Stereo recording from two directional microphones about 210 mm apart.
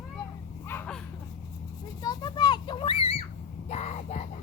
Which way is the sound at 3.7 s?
30° left (ahead or behind).